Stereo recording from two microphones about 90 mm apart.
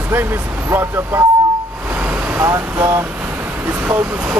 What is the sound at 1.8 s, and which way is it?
Vehicle, 20° right (ahead or behind).